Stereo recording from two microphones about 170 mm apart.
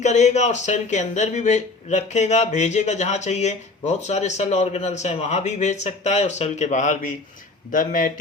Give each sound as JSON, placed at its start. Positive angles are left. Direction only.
{"t": 0.0, "sound": "speech", "side_deg": 45}